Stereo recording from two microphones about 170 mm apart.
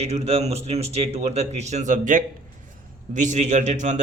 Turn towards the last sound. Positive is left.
turn(degrees=-45)  # may be behind; listen again after turning